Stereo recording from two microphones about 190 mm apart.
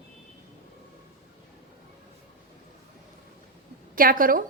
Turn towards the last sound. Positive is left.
turn(degrees=-45)  # may be behind; listen again after turning